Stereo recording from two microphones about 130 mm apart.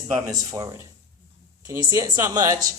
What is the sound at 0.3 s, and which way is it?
Speech, 25° right (ahead or behind).